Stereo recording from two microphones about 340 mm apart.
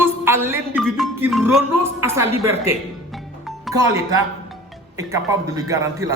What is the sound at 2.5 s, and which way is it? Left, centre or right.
Speech, centre.